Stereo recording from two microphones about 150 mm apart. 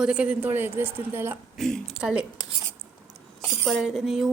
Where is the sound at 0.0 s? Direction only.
5° right (ahead or behind).